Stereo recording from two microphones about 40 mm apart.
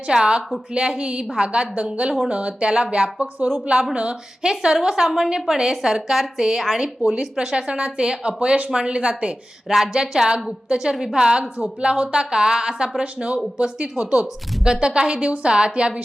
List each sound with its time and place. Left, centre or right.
0.1 s speech: right
4.4 s a woman's voice: centre
9.6 s a woman's voice: centre
13.0 s speech: right
14.6 s speech: right